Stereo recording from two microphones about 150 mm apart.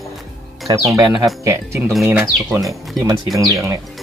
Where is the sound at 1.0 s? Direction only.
25° right (ahead or behind).